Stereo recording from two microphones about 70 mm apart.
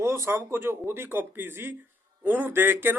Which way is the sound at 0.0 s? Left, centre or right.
Right.